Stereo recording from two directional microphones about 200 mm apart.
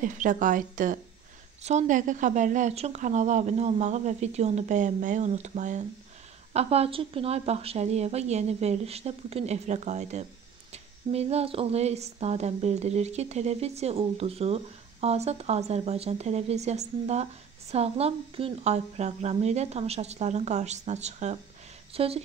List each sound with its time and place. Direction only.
0.0 s a woman's voice: 40° right (ahead or behind)